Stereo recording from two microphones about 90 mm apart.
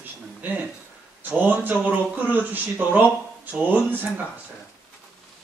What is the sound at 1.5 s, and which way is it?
Speech, 20° right (ahead or behind).